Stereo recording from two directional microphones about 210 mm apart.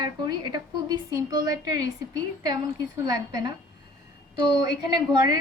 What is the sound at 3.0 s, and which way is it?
Speech, 20° right (ahead or behind).